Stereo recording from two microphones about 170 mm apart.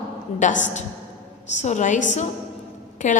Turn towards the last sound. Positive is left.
turn(degrees=45)  # may be behind; listen again after turning